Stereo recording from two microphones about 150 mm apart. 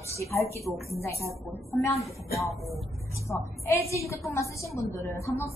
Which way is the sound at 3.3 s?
20° left (ahead or behind).